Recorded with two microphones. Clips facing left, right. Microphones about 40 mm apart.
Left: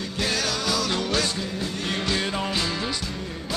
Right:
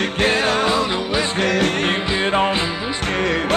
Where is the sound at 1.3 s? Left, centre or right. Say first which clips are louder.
Right 12 dB; right.